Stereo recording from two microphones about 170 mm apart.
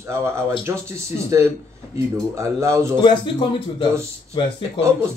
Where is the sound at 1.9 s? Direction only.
15° right (ahead or behind).